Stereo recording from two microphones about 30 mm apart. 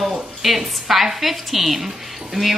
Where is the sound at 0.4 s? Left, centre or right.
Centre.